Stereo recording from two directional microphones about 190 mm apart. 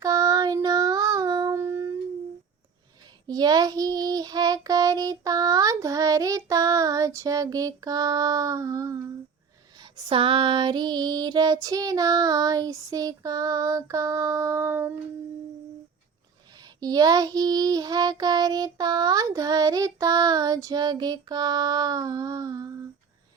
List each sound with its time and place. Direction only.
0.0 s child singing: 20° right (ahead or behind)
3.2 s child singing: 20° right (ahead or behind)
9.8 s child singing: 30° right (ahead or behind); by 14.9 s 10° right (ahead or behind)
16.8 s child singing: 20° right (ahead or behind)